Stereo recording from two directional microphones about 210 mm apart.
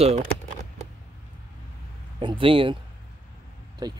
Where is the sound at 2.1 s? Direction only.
25° right (ahead or behind).